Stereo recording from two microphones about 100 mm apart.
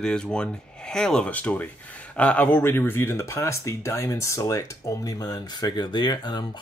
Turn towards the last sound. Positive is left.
turn(degrees=45)  # may be behind; listen again after turning